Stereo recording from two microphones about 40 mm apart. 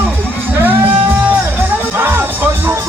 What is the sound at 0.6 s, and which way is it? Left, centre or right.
Music, right.